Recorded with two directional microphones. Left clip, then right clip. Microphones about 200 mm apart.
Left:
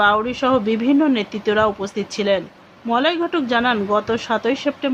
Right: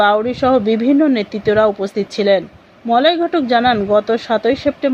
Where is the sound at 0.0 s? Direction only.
10° right (ahead or behind).